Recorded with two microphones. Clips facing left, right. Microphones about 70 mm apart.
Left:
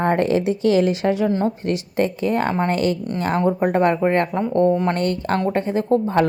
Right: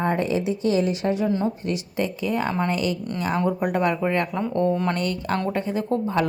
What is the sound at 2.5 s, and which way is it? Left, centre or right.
Speech, left.